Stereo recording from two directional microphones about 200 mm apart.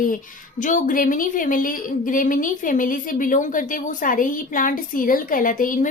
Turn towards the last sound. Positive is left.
turn(degrees=45)  # may be behind; listen again after turning